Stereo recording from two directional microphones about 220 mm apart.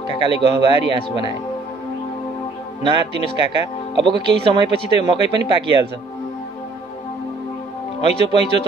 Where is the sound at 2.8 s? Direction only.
25° right (ahead or behind).